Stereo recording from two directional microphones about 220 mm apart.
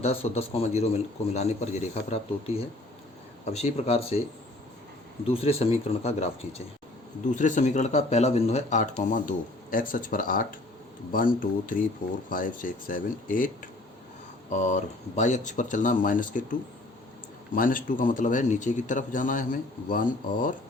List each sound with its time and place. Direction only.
0.0 s speech: 30° left (ahead or behind)
5.3 s speech: 25° left (ahead or behind)